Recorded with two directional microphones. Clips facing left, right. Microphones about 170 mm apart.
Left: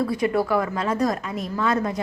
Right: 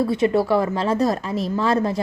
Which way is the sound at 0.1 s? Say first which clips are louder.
Right 3 dB; 25° right (ahead or behind).